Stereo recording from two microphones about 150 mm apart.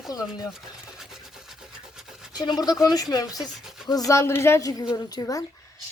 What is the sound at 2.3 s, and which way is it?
Speech, 25° left (ahead or behind).